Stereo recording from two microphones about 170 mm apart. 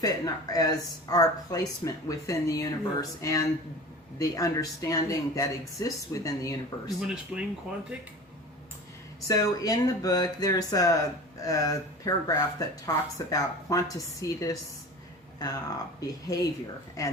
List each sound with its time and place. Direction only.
0.0 s speech: 20° left (ahead or behind)
7.0 s speech: 5° right (ahead or behind)
9.2 s speech: 20° left (ahead or behind)